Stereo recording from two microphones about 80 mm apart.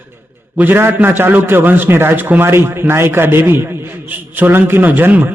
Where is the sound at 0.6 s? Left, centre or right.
Right.